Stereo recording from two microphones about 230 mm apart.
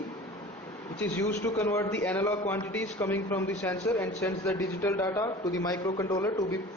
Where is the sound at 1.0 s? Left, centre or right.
Centre.